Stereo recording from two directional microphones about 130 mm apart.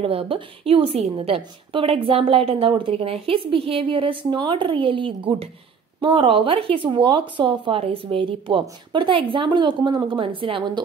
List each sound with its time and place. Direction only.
0.0 s a woman's voice: 45° right (ahead or behind)